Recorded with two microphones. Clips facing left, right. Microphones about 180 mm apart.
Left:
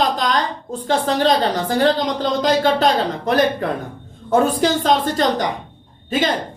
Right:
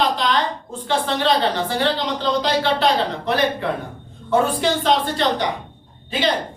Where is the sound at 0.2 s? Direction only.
40° left (ahead or behind).